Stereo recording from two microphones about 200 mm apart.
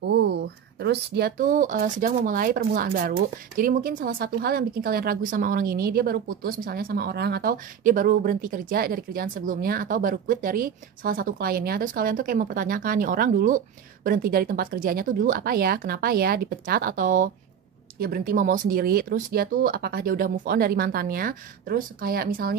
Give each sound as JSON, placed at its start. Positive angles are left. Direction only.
{"t": 0.1, "sound": "speech", "side_deg": -55}